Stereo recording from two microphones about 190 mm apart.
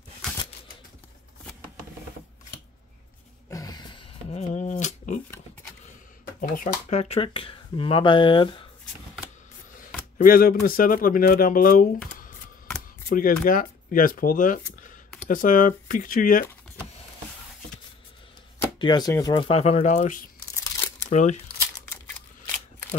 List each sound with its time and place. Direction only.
3.4 s a sound: 20° left (ahead or behind)
4.3 s a sound: 35° left (ahead or behind)
6.4 s speech: 45° left (ahead or behind); by 8.6 s 25° left (ahead or behind)
10.1 s speech: 45° left (ahead or behind)
13.1 s speech: 50° left (ahead or behind)
18.8 s speech: 20° left (ahead or behind); by 21.4 s 40° left (ahead or behind)